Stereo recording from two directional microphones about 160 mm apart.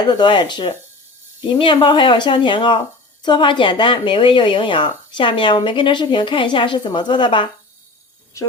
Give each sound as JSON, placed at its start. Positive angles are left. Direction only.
{"t": 0.0, "sound": "speech", "side_deg": 25}